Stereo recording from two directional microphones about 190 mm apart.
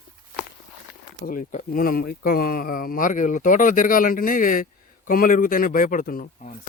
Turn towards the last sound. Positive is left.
turn(degrees=45)  # may be behind; listen again after turning